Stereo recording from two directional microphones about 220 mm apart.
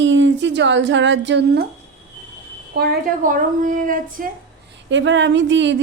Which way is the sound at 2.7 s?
40° right (ahead or behind).